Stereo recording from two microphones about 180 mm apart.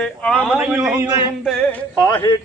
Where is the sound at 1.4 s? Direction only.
5° left (ahead or behind).